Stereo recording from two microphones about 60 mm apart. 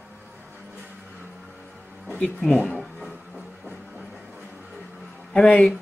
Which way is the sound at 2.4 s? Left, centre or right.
Left.